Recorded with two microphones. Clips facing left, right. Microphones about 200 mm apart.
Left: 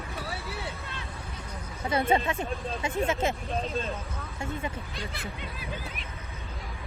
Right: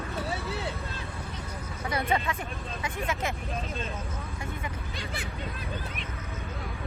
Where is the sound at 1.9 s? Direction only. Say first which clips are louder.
Left 4 dB; 30° left (ahead or behind).